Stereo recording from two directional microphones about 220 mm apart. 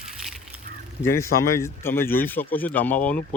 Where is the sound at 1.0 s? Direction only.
10° left (ahead or behind).